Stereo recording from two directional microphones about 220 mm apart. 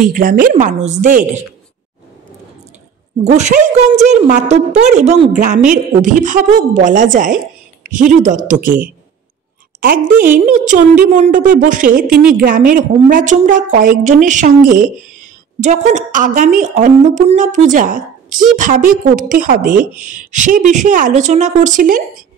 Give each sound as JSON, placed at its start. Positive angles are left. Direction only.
{"t": 0.0, "sound": "a woman's voice", "side_deg": -40}
{"t": 3.3, "sound": "a woman's voice", "side_deg": -30}